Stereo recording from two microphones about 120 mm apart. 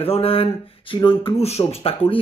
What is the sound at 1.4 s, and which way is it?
Speech, 60° left (ahead or behind).